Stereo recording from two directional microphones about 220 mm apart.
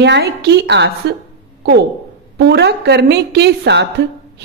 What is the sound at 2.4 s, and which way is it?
A woman's voice, 50° right (ahead or behind).